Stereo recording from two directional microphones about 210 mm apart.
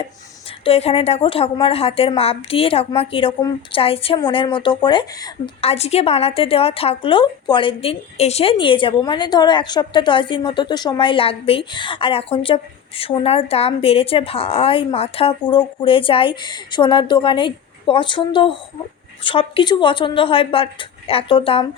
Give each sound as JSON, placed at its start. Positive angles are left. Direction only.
{"t": 0.6, "sound": "a woman's voice", "side_deg": 30}